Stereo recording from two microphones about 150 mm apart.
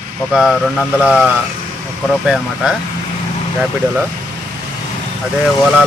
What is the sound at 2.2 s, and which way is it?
Speech, 5° right (ahead or behind).